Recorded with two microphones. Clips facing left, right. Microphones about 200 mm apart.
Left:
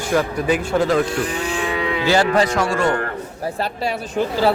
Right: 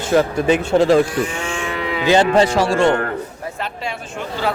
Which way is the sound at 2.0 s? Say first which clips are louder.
Right 4 dB; 20° right (ahead or behind).